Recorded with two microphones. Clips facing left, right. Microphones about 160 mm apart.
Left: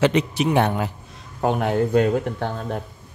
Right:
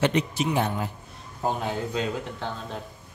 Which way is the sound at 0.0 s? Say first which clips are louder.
Left 5 dB; 80° left.